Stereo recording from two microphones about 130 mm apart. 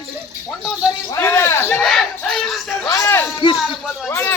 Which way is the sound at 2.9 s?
20° left (ahead or behind).